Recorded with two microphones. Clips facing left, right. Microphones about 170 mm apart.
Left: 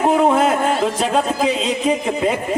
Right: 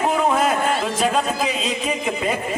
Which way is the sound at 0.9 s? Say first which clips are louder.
Left 2 dB; 30° left (ahead or behind).